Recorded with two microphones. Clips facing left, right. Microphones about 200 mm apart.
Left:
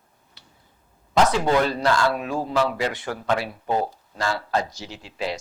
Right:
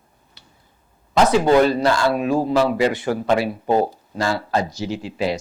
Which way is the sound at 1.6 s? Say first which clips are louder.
Right 4 dB; 10° right (ahead or behind).